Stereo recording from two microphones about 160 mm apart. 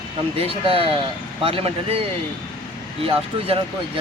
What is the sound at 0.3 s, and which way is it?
Speech, 35° right (ahead or behind).